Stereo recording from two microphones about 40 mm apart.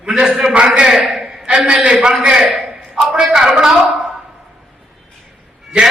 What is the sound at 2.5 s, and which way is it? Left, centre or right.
A man's voice, centre.